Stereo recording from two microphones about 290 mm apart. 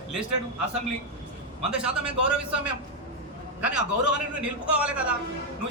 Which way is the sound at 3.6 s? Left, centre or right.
Centre.